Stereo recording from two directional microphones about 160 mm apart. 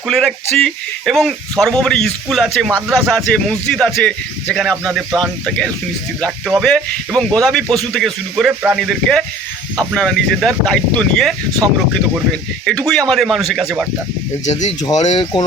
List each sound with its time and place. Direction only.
0.1 s speech: centre (ahead or behind)
12.9 s speech: 5° left (ahead or behind)
14.4 s speech: 45° left (ahead or behind)
15.1 s speech: 25° left (ahead or behind)